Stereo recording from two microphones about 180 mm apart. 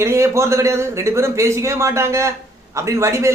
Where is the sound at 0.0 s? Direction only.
15° right (ahead or behind).